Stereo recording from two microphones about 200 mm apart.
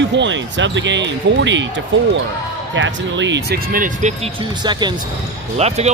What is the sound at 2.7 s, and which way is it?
Speech, 65° right (ahead or behind).